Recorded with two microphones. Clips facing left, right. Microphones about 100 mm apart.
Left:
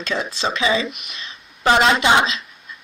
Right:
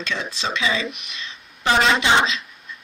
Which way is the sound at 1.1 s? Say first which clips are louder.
Even; 35° left (ahead or behind).